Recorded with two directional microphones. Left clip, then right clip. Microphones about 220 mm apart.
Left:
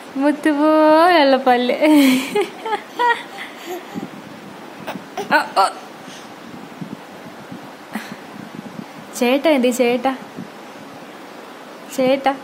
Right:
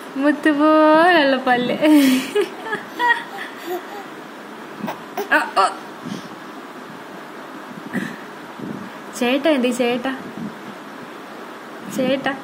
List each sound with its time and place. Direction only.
0.2 s a woman's voice: 10° left (ahead or behind)
2.3 s a sound: 20° left (ahead or behind)
5.3 s a woman's voice: 15° left (ahead or behind)
9.2 s a woman's voice: 15° left (ahead or behind)
12.0 s a woman's voice: 15° left (ahead or behind)